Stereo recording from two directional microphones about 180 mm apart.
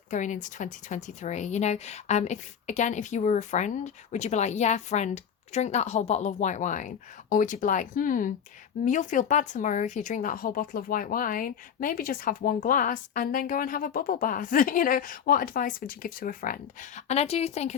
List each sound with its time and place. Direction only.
0.1 s speech: 45° left (ahead or behind)